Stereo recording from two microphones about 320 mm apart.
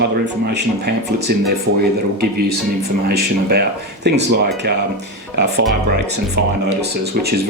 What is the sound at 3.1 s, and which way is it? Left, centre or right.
Speech, right.